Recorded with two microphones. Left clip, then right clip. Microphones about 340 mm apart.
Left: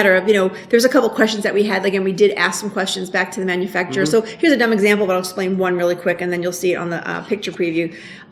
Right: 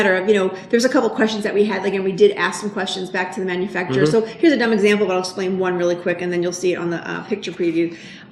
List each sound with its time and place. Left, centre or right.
0.0 s speech: left